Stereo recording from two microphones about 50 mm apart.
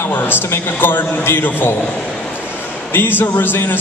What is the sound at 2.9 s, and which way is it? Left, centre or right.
Speech, left.